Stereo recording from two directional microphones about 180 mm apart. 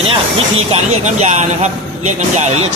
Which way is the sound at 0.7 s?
40° right (ahead or behind).